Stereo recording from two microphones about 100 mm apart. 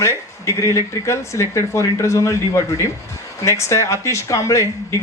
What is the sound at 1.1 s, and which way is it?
Speech, 30° left (ahead or behind).